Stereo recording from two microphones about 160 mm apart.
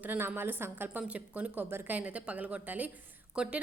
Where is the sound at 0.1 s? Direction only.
15° right (ahead or behind).